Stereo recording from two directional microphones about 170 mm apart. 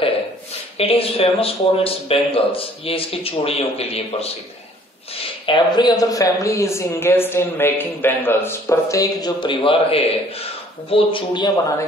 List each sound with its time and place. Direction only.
0.7 s speech: 35° left (ahead or behind)
5.5 s a woman's voice: 25° left (ahead or behind)